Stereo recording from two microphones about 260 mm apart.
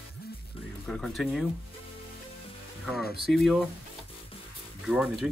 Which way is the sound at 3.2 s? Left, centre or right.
Centre.